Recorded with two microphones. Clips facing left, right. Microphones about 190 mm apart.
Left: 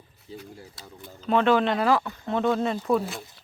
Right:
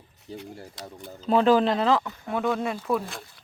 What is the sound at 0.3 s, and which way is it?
Speech, 70° right (ahead or behind).